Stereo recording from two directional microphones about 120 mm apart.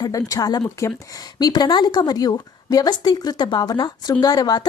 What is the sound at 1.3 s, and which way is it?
A woman's voice, 35° left (ahead or behind).